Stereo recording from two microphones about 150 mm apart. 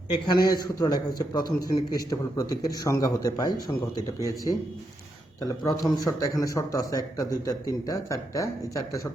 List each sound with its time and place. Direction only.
0.1 s speech: 30° left (ahead or behind)